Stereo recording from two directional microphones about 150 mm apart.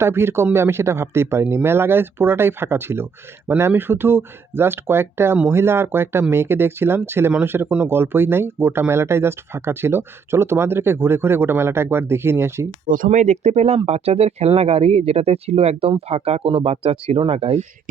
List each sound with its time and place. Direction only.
0.0 s speech: 15° right (ahead or behind)
12.9 s speech: 60° right (ahead or behind); by 17.7 s 40° right (ahead or behind)